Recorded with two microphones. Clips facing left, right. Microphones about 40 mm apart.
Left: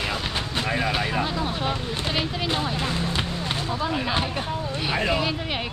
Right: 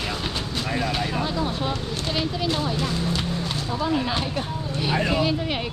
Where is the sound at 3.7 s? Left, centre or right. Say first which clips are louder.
Right 3 dB; centre.